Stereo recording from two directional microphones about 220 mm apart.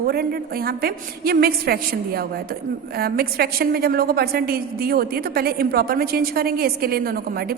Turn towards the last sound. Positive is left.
turn(degrees=-45)  # may be behind; listen again after turning